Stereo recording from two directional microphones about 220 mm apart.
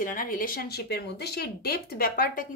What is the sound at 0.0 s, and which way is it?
Speech, 40° left (ahead or behind).